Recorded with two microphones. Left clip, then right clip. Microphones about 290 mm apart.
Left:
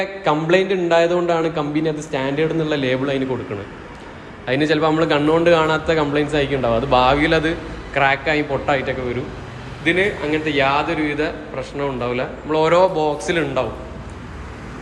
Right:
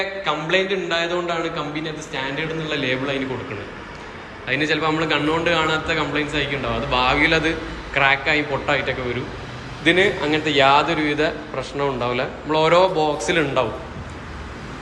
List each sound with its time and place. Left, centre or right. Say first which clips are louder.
0.0 s a man's voice: left 3 dB; centre
4.4 s a man's voice: left 3 dB; centre